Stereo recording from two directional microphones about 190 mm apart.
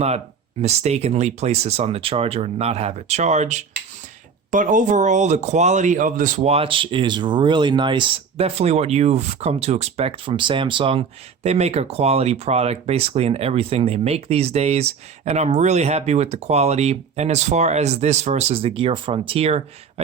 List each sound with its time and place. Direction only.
0.6 s speech: 35° right (ahead or behind)